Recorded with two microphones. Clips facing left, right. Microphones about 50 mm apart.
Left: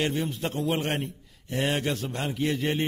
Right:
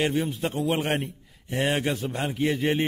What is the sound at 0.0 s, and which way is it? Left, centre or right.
A man's voice, centre.